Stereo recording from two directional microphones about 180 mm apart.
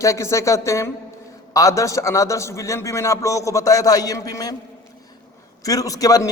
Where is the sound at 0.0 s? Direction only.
15° left (ahead or behind).